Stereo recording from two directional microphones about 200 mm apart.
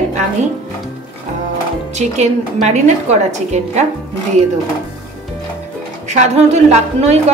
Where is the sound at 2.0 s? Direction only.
35° right (ahead or behind).